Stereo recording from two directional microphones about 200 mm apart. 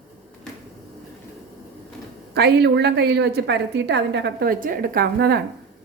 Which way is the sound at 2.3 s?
55° right (ahead or behind).